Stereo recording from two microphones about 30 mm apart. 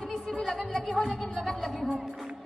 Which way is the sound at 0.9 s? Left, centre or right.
Centre.